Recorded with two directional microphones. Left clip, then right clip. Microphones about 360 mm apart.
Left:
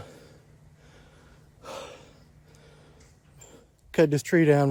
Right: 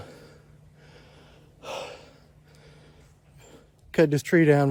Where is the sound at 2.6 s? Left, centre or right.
Centre.